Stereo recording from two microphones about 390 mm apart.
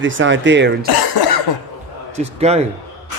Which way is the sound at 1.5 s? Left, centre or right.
Left.